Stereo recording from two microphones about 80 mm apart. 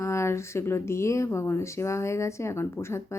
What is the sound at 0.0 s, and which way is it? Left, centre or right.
Speech, left.